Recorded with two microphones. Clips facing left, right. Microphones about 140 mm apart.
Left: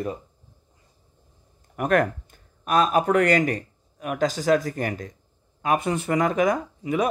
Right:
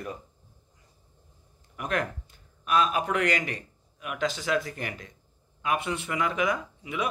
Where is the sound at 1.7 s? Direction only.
50° left (ahead or behind).